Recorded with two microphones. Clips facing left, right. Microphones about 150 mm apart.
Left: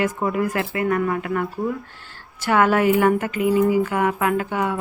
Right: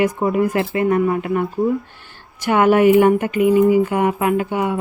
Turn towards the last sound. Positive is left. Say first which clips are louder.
# right 3 dB
turn(degrees=-15)  # may be behind; listen again after turning